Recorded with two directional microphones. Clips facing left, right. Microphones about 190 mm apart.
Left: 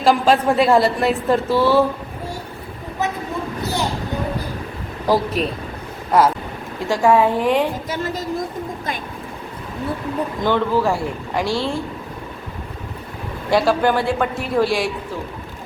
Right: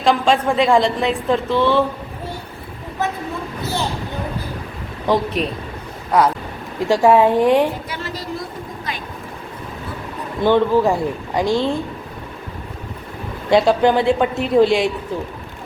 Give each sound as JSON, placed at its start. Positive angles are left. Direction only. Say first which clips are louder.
{"t": 0.0, "sound": "a woman's voice", "louder": "left 1 dB", "side_deg": 5}
{"t": 5.0, "sound": "a woman's voice", "louder": "even", "side_deg": 5}
{"t": 6.7, "sound": "a woman's voice", "louder": "right 2 dB", "side_deg": -15}
{"t": 7.9, "sound": "speech", "louder": "left 4 dB", "side_deg": 45}
{"t": 10.4, "sound": "speech", "louder": "right 4 dB", "side_deg": -15}
{"t": 13.5, "sound": "speech", "louder": "right 3 dB", "side_deg": -20}